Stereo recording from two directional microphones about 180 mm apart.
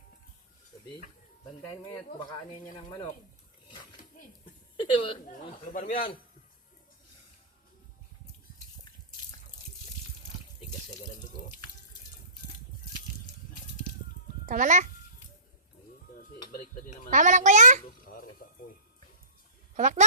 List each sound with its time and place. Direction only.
1.9 s speech: 20° left (ahead or behind)
4.8 s speech: 25° left (ahead or behind)
5.7 s a man's voice: 50° left (ahead or behind)
8.5 s water: 55° left (ahead or behind)
14.4 s a child's voice: 45° right (ahead or behind)
17.1 s a child's voice: 45° right (ahead or behind)
18.0 s a sound: 55° left (ahead or behind)
19.7 s a child's voice: 40° right (ahead or behind)